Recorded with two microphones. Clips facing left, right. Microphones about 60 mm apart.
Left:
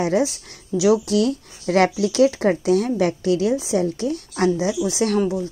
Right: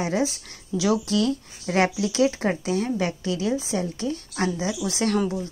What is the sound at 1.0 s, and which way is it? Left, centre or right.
Speech, right.